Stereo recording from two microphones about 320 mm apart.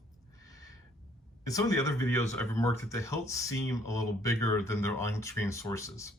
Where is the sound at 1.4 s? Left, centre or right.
Centre.